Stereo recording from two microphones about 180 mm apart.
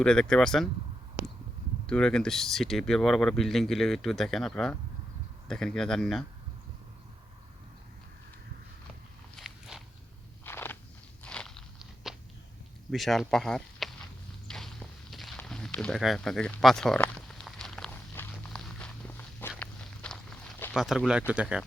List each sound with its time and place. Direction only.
0.0 s speech: 5° left (ahead or behind)
1.9 s speech: 5° left (ahead or behind)
9.4 s walk: centre (ahead or behind)
10.4 s walk: 10° left (ahead or behind)
11.2 s crunch: 5° left (ahead or behind)
12.9 s speech: centre (ahead or behind)
14.4 s boat: centre (ahead or behind)
15.1 s a sound: centre (ahead or behind)
20.7 s speech: centre (ahead or behind)